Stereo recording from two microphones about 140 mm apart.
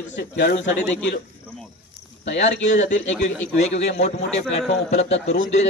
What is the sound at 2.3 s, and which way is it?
A man's voice, 60° left (ahead or behind).